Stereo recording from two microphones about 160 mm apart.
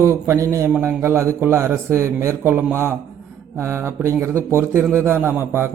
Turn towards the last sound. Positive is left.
turn(degrees=-15)  # may be behind; listen again after turning